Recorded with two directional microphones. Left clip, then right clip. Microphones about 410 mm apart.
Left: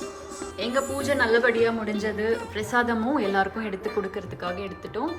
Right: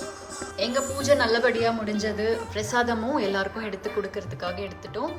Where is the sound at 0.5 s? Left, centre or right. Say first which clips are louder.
Even; centre.